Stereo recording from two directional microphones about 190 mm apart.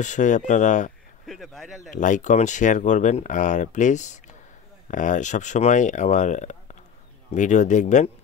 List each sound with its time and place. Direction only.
0.0 s speech: 40° left (ahead or behind)
1.2 s speech: centre (ahead or behind)
1.9 s speech: 40° left (ahead or behind)